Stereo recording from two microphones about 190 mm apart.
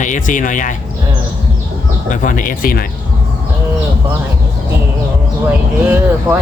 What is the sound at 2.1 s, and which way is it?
Speech, 45° left (ahead or behind).